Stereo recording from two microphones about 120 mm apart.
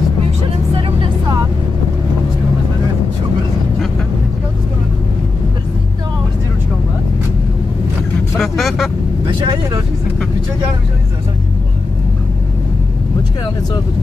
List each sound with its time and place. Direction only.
0.4 s music: 50° right (ahead or behind)
8.4 s vehicle: centre (ahead or behind)
9.4 s vehicle: 35° right (ahead or behind)